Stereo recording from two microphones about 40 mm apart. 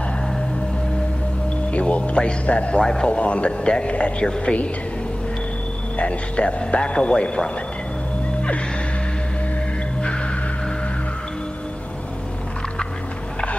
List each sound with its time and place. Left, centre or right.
1.7 s speech: left
2.8 s a man's voice: centre
3.1 s speech: left
5.9 s speech: left
8.4 s gasp: left
10.0 s music: left